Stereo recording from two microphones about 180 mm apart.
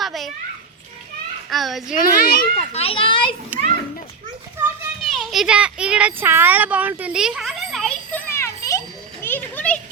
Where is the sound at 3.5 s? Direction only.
10° right (ahead or behind).